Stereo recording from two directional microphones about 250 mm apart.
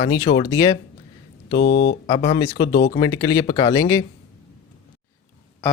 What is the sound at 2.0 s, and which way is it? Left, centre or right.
Speech, left.